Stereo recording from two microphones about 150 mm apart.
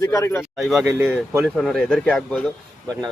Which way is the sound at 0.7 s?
15° right (ahead or behind).